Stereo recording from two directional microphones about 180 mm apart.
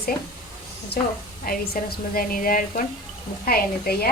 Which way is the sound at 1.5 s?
55° left (ahead or behind).